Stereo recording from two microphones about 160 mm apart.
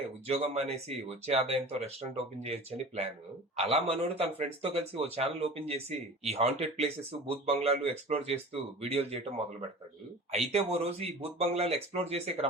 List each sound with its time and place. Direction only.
0.3 s speech: 40° right (ahead or behind)